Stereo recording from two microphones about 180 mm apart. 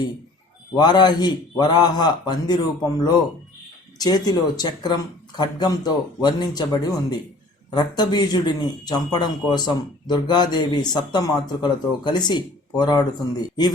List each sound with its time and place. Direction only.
0.8 s speech: 25° left (ahead or behind)
3.9 s speech: 20° left (ahead or behind)